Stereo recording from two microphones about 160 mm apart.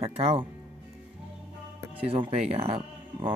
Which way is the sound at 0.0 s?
40° right (ahead or behind).